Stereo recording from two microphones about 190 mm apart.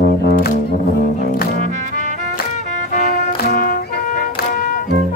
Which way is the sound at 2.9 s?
45° left (ahead or behind).